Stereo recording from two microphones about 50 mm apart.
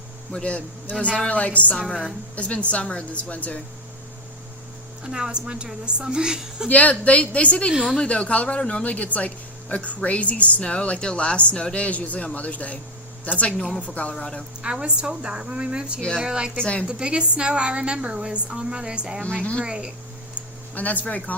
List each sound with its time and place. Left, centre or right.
0.3 s a man's voice: left
5.0 s a woman's voice: centre
6.7 s a man's voice: left
7.7 s a woman's voice: centre
8.0 s a man's voice: left
14.2 s speech: centre
14.6 s a woman's voice: right
16.6 s a man's voice: left
16.8 s a woman's voice: centre
19.4 s a man's voice: left
19.6 s a woman's voice: centre
20.3 s a sound: left